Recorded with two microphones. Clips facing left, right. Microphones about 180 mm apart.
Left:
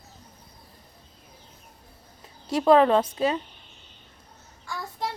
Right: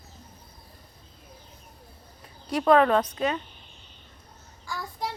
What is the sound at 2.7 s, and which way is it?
Speech, 25° left (ahead or behind).